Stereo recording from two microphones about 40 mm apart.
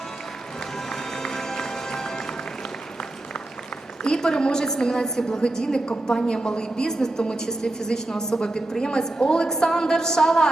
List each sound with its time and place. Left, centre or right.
0.9 s music: centre
4.0 s a woman's voice: centre